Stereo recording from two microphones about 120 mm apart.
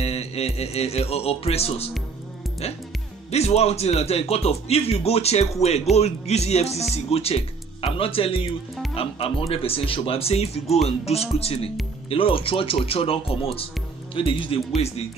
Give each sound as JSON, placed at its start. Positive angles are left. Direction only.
{"t": 0.0, "sound": "speech", "side_deg": 60}
{"t": 3.3, "sound": "speech", "side_deg": 60}